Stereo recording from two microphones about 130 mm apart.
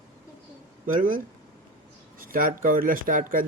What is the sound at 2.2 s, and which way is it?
Speech, 90° right.